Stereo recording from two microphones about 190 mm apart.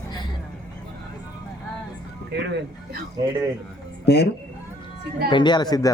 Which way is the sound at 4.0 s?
60° left (ahead or behind).